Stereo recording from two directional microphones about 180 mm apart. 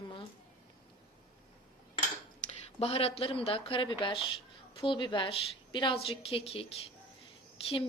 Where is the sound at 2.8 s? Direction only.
35° left (ahead or behind).